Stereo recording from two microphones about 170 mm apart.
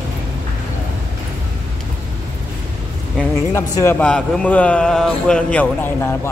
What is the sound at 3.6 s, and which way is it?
A man's voice, 15° left (ahead or behind).